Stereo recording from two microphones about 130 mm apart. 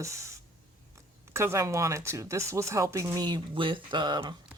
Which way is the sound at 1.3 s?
20° right (ahead or behind).